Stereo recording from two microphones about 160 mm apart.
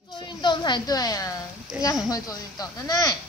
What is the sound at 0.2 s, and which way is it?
A woman's voice, 25° left (ahead or behind).